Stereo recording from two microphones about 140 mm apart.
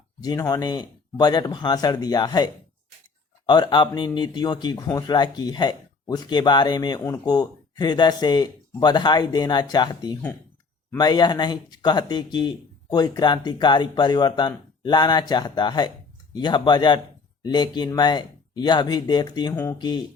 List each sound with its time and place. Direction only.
0.2 s speech: 25° left (ahead or behind)